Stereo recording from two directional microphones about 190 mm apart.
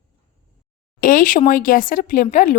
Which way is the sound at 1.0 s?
45° left (ahead or behind).